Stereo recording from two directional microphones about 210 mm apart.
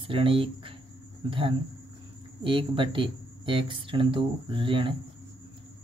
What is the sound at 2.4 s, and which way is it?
Speech, 25° right (ahead or behind).